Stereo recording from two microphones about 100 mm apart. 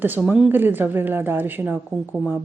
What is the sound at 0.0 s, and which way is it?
Speech, 20° right (ahead or behind).